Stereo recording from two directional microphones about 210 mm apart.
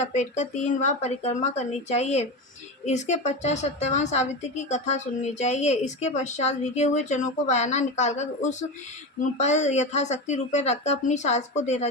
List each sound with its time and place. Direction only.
0.0 s a woman's voice: 35° left (ahead or behind)